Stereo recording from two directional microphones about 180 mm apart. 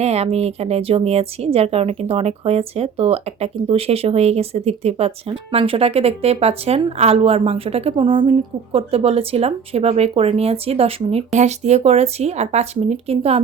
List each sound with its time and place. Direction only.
0.0 s a woman's voice: 35° right (ahead or behind)